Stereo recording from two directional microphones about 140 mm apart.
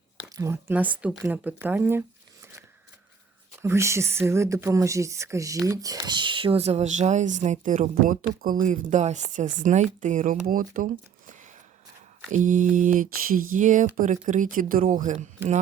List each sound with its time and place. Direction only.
0.3 s speech: 25° right (ahead or behind)
0.7 s speech: 10° right (ahead or behind); by 10.8 s 80° right
11.3 s a sound: 65° right (ahead or behind)
12.3 s speech: 65° right (ahead or behind)
15.4 s speech: 15° right (ahead or behind)